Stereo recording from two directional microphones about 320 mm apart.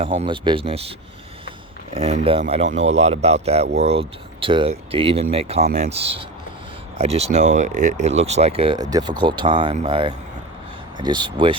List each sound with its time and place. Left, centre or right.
0.0 s speech: centre
1.9 s speech: centre